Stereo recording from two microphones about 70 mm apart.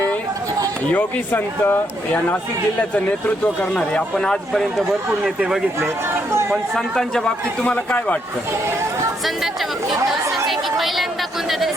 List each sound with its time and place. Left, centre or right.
0.9 s a man's voice: centre
1.3 s speech: left
2.9 s speech: centre
6.5 s speech: centre
7.6 s a man's voice: left
9.2 s speech: centre